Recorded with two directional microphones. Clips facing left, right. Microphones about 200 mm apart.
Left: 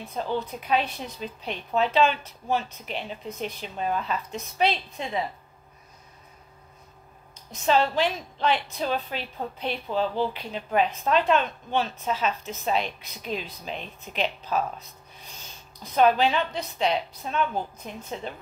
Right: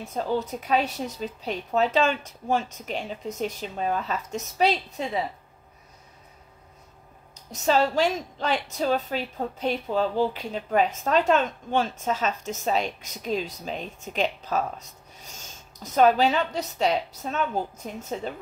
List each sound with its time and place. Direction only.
0.0 s speech: 40° right (ahead or behind)
7.5 s a woman's voice: 40° right (ahead or behind)